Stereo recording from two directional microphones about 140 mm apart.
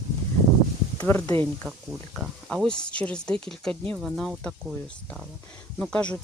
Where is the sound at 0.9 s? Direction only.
15° left (ahead or behind).